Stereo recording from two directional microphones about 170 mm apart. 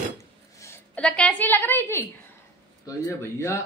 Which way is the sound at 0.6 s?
10° left (ahead or behind).